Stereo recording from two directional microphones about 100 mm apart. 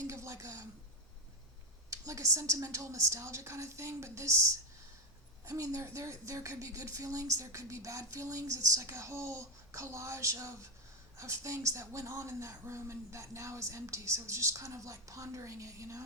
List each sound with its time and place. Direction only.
0.1 s a sound: 30° right (ahead or behind)
1.9 s a woman's voice: 35° right (ahead or behind)
5.5 s a woman's voice: 35° right (ahead or behind)